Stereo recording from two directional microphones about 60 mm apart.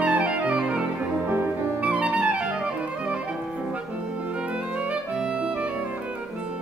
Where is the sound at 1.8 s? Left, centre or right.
Centre.